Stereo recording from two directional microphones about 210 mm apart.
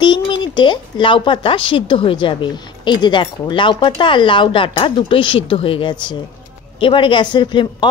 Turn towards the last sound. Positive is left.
turn(degrees=20)  # may be behind; listen again after turning